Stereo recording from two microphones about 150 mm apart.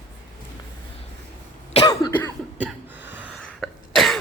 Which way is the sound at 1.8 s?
25° left (ahead or behind).